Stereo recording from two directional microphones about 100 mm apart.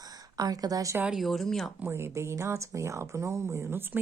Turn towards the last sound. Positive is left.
turn(degrees=-20)  # may be behind; listen again after turning